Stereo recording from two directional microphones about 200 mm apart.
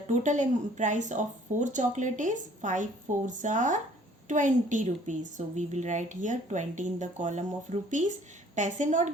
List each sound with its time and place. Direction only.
0.1 s a woman's voice: 40° right (ahead or behind)